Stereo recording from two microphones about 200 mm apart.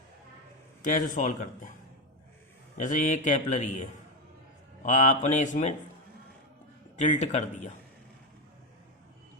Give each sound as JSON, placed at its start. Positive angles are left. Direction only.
{"t": 0.8, "sound": "a man's voice", "side_deg": 40}
{"t": 2.7, "sound": "a man's voice", "side_deg": 40}
{"t": 6.9, "sound": "a man's voice", "side_deg": 35}